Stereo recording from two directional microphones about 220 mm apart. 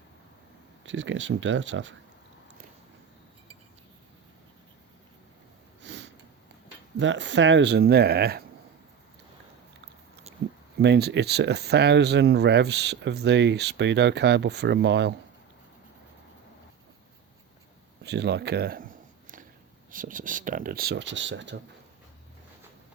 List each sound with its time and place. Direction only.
0.9 s speech: 60° right (ahead or behind)
5.8 s a sound: 55° right (ahead or behind)
7.0 s speech: 55° right (ahead or behind)
10.8 s speech: 50° right (ahead or behind)
18.0 s speech: 50° right (ahead or behind)
19.9 s speech: 40° right (ahead or behind); by 21.6 s 55° right (ahead or behind)